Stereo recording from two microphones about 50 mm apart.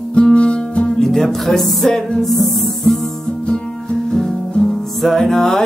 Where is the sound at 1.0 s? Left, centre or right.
Centre.